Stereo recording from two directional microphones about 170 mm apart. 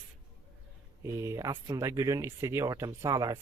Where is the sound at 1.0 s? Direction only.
15° right (ahead or behind).